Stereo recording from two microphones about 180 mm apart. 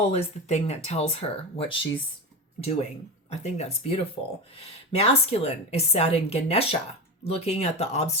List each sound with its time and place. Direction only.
0.1 s speech: 35° left (ahead or behind)
3.2 s speech: 35° left (ahead or behind)